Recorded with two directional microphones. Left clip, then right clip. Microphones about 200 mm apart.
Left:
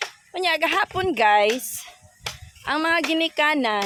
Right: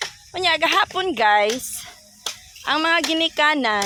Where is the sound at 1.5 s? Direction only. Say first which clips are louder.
Right 1 dB; 10° right (ahead or behind).